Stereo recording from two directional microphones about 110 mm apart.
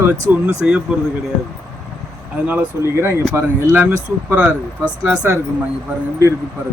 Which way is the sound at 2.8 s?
20° right (ahead or behind).